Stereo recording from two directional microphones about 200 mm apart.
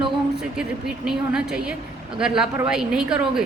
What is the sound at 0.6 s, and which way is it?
A woman's voice, 5° right (ahead or behind).